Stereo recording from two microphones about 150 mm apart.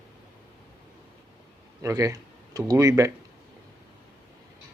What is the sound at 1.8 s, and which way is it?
Speech, 20° right (ahead or behind).